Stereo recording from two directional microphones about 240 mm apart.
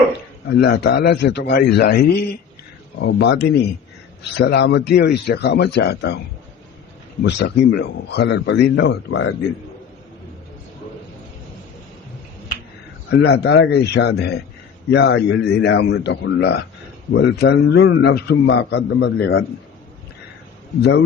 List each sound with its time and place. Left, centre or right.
0.4 s a man's voice: left
7.2 s a man's voice: left
13.1 s a man's voice: left